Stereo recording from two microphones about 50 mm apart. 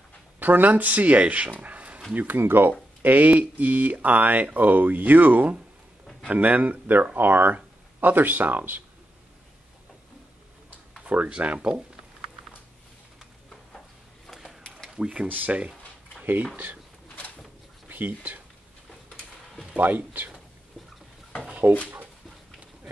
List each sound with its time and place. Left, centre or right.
0.4 s speech: right
2.1 s speech: right
3.0 s speech: right
11.1 s speech: right
13.5 s a sound: centre
15.0 s speech: centre
15.2 s speech: right
17.8 s speech: right
19.7 s speech: right
21.6 s speech: right